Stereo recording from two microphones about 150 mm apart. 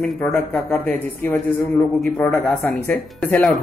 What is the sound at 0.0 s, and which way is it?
Speech, 5° left (ahead or behind).